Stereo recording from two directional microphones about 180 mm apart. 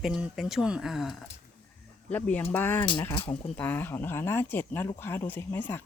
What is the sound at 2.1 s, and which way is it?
Speech, 10° left (ahead or behind).